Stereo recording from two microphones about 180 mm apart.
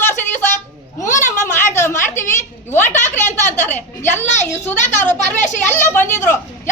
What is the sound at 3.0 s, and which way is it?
A woman's voice, 10° left (ahead or behind).